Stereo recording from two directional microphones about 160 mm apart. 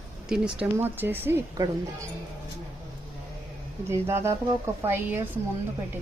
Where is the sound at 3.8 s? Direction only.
15° right (ahead or behind).